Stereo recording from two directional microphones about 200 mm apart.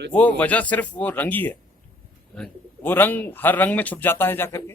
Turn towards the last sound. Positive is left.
turn(degrees=10)  # may be behind; listen again after turning